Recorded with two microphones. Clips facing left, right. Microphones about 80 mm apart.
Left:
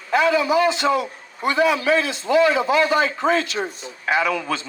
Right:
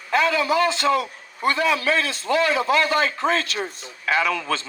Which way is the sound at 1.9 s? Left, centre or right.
Right.